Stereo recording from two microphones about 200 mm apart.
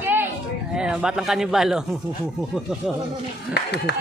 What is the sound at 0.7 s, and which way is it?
A man's voice, 5° right (ahead or behind).